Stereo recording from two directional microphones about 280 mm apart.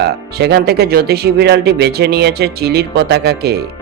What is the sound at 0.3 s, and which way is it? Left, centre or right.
Speech, right.